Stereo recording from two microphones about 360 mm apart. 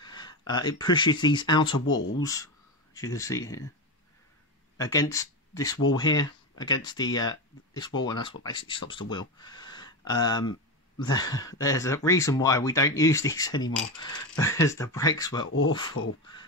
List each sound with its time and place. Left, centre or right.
0.0 s speech: centre
4.7 s speech: centre
16.0 s speech: left